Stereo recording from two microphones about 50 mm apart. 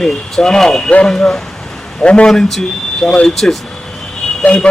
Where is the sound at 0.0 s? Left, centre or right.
Centre.